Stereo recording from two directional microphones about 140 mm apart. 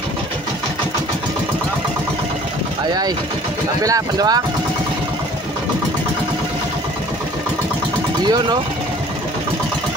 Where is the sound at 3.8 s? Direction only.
25° right (ahead or behind).